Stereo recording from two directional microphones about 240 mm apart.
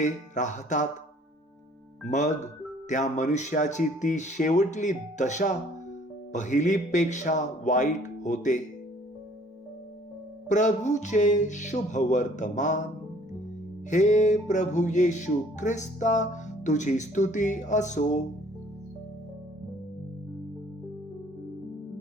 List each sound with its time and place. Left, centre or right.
0.0 s music: left
2.0 s speech: left
6.3 s music: left
10.5 s music: left
13.9 s music: left